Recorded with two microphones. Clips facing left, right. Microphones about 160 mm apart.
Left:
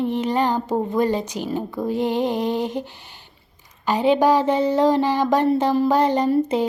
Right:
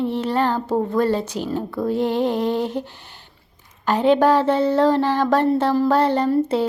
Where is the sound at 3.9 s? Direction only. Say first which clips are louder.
Right 1 dB; 10° left (ahead or behind).